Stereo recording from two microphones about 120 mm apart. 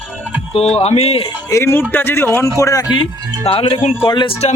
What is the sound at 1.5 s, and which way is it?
A man's voice, 20° left (ahead or behind).